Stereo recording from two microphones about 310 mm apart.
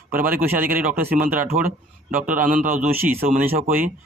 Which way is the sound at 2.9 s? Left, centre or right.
Centre.